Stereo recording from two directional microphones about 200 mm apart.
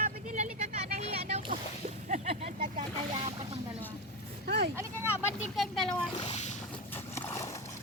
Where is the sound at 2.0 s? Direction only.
35° right (ahead or behind).